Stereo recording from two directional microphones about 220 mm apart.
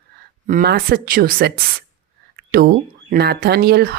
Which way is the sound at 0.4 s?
40° right (ahead or behind).